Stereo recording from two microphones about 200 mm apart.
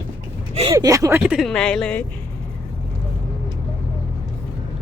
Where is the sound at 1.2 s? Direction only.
Centre (ahead or behind).